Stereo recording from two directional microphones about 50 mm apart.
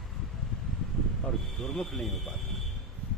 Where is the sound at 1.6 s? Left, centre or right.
Centre.